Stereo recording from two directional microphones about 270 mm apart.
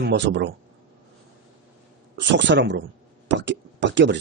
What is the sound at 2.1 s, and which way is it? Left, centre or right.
Speech, right.